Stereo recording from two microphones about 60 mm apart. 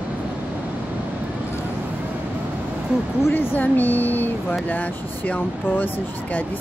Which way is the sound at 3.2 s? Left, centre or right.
Left.